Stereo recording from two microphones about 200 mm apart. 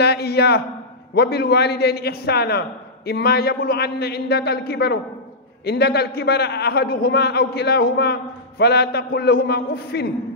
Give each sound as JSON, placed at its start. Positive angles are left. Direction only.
{"t": 0.0, "sound": "a man's voice", "side_deg": 55}